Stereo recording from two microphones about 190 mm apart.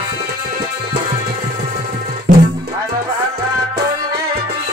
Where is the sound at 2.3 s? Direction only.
40° right (ahead or behind).